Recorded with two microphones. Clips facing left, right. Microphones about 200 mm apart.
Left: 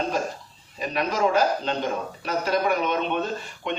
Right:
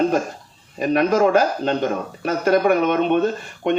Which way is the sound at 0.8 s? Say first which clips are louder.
Right 8 dB; 50° right (ahead or behind).